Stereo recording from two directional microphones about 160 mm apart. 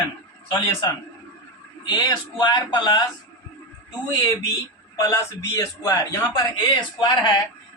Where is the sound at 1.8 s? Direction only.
25° left (ahead or behind).